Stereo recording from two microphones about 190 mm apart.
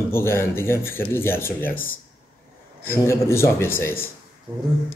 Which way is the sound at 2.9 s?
15° left (ahead or behind).